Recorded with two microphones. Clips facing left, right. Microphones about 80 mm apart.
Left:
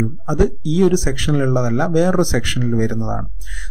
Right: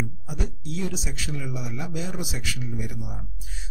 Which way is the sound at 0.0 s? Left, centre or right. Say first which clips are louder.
Left 15 dB; left.